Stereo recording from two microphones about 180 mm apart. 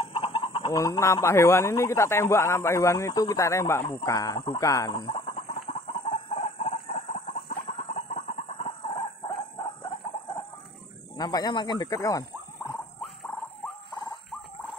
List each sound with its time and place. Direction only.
0.0 s chicken: 30° left (ahead or behind)
0.7 s speech: 15° left (ahead or behind)
3.9 s a sound: 15° left (ahead or behind)
7.7 s chicken: 35° left (ahead or behind)
9.6 s a sound: 20° left (ahead or behind)
13.9 s dog: 25° left (ahead or behind)